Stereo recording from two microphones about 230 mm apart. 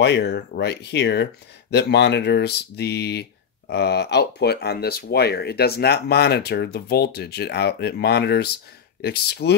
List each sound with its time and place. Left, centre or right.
0.0 s speech: left